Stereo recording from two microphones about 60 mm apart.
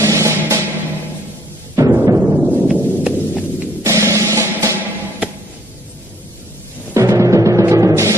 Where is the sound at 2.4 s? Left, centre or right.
Centre.